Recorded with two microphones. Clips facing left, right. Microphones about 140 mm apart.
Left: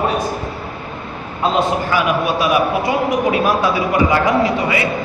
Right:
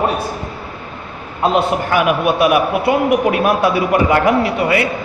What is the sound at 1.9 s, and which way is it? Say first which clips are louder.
A man's voice: right 2 dB; 60° right (ahead or behind).